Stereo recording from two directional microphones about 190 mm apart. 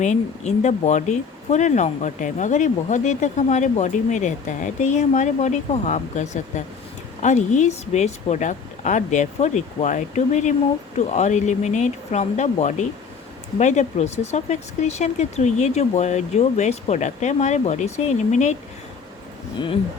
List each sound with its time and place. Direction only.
0.0 s speech: 40° left (ahead or behind)
19.5 s speech: 25° left (ahead or behind)